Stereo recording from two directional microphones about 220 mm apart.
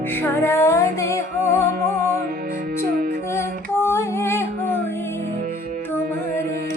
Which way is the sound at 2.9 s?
40° right (ahead or behind).